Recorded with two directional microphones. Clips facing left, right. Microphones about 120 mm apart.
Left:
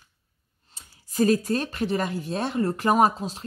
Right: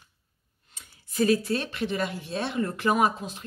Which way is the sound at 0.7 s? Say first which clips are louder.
Left 3 dB; 40° left (ahead or behind).